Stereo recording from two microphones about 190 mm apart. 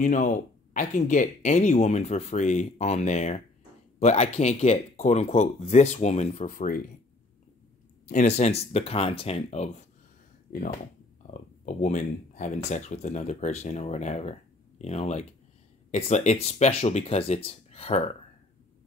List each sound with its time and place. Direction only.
0.0 s speech: 40° left (ahead or behind)
8.1 s speech: 40° left (ahead or behind)
10.5 s speech: 45° left (ahead or behind)